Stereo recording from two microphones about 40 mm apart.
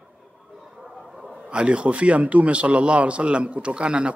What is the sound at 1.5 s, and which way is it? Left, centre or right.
A man's voice, right.